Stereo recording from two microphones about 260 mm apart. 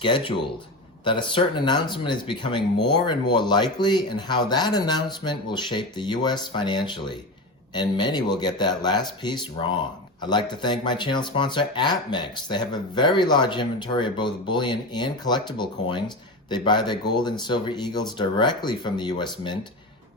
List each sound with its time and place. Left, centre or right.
0.0 s speech: centre